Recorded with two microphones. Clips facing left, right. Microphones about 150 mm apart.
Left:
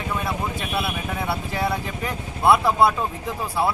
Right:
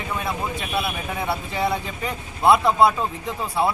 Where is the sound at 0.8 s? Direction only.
15° right (ahead or behind).